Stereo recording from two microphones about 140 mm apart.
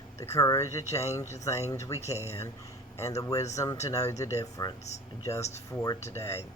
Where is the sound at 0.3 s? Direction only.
25° left (ahead or behind).